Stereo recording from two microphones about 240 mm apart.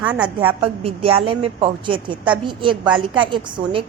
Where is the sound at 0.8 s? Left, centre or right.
Right.